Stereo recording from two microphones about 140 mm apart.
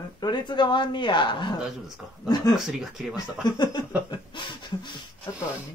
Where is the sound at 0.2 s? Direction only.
30° left (ahead or behind).